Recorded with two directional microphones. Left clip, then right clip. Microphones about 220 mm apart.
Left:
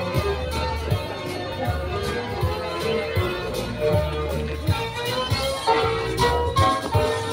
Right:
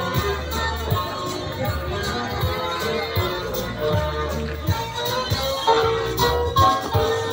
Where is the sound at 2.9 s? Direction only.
5° left (ahead or behind).